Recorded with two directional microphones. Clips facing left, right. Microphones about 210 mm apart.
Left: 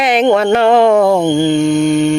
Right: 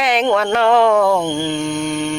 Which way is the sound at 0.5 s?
15° left (ahead or behind).